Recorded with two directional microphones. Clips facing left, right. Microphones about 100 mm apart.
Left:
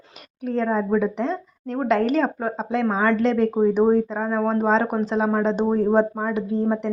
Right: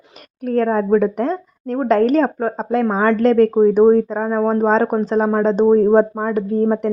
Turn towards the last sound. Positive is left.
turn(degrees=-45)  # may be behind; listen again after turning